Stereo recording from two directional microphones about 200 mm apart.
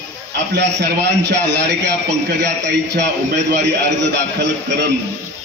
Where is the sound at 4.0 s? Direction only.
60° right (ahead or behind).